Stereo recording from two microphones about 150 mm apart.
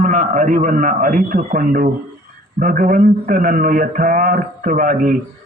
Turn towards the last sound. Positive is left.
turn(degrees=-65)  # may be behind; listen again after turning